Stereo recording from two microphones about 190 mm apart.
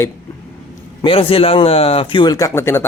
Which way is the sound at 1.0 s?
30° left (ahead or behind).